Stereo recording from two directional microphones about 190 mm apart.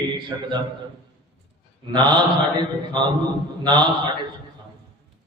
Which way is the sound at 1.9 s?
25° right (ahead or behind).